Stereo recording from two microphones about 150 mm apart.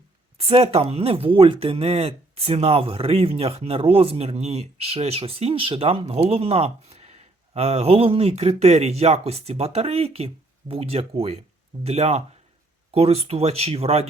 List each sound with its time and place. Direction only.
0.3 s speech: 40° right (ahead or behind)